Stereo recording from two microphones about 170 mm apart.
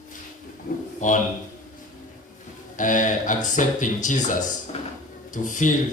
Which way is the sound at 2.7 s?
50° left (ahead or behind).